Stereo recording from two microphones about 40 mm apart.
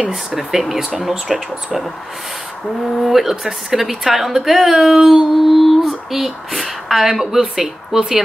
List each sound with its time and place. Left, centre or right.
0.4 s a woman's voice: centre
3.0 s a woman's voice: centre